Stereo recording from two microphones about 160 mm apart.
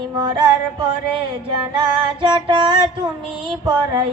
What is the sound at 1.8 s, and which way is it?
Female singing, 30° right (ahead or behind).